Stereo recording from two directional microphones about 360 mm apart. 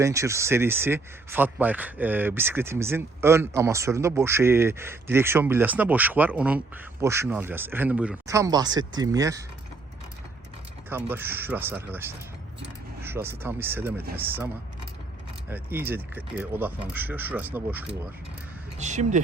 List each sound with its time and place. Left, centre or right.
0.0 s speech: centre
10.8 s speech: centre
18.8 s speech: centre